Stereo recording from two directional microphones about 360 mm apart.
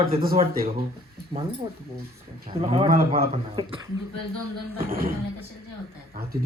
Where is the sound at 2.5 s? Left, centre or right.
Centre.